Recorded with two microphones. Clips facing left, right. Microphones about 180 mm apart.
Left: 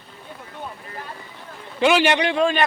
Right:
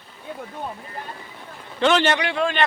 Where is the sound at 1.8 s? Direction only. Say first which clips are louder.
Left 1 dB; 10° left (ahead or behind).